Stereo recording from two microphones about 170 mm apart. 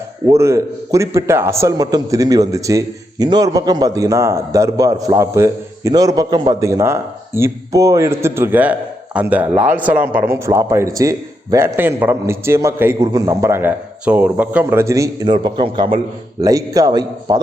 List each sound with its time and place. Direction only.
0.3 s a man's voice: 15° right (ahead or behind)